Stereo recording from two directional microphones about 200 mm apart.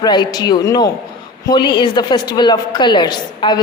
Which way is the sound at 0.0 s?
20° left (ahead or behind).